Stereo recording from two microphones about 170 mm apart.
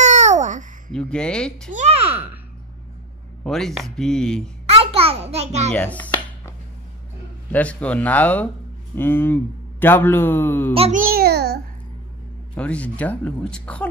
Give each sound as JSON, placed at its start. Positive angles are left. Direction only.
{"t": 0.0, "sound": "babbling", "side_deg": -45}
{"t": 0.9, "sound": "speech", "side_deg": 5}
{"t": 1.7, "sound": "a child's voice", "side_deg": -40}
{"t": 3.4, "sound": "speech", "side_deg": 0}
{"t": 4.6, "sound": "a child's voice", "side_deg": -35}
{"t": 5.7, "sound": "music", "side_deg": 10}
{"t": 7.5, "sound": "speech", "side_deg": 10}
{"t": 10.7, "sound": "a child's voice", "side_deg": -35}
{"t": 11.0, "sound": "babbling", "side_deg": -60}
{"t": 12.5, "sound": "speech", "side_deg": 10}